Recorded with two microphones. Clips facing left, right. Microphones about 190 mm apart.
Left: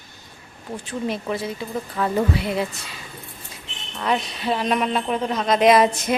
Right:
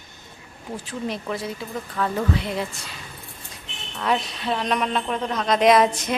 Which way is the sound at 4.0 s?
Centre (ahead or behind).